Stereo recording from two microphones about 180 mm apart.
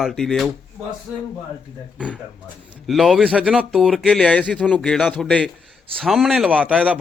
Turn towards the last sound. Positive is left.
turn(degrees=-5)  # may be behind; listen again after turning